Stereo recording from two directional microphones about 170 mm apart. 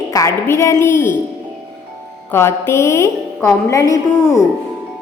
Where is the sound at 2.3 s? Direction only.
15° left (ahead or behind).